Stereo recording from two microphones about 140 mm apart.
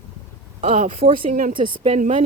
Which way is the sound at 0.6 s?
55° right (ahead or behind).